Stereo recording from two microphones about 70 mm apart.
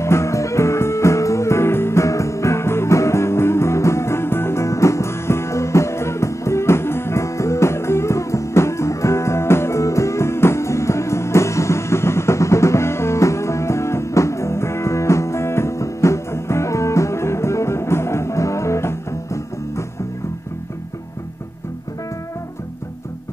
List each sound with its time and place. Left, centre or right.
0.0 s music: left